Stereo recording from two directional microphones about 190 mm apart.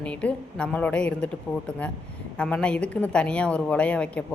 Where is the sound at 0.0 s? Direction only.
5° left (ahead or behind).